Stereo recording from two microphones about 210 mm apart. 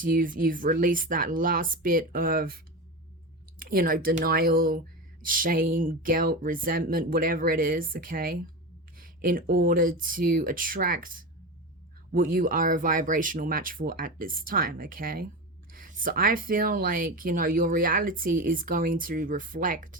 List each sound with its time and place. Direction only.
0.0 s speech: 40° right (ahead or behind)
3.6 s speech: 45° right (ahead or behind)